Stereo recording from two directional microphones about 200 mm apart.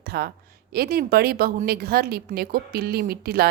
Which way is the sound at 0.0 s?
50° right (ahead or behind).